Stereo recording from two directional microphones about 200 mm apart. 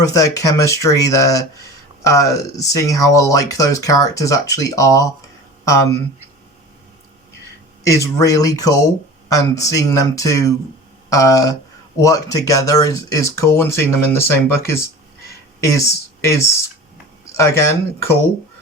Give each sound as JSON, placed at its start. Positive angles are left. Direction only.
{"t": 0.0, "sound": "speech", "side_deg": 15}
{"t": 7.9, "sound": "speech", "side_deg": 15}